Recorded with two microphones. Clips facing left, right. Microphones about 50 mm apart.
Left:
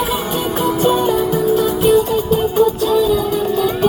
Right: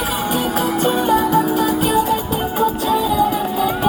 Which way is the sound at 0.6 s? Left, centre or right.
Centre.